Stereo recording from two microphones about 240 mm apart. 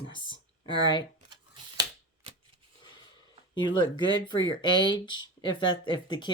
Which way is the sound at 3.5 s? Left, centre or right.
Centre.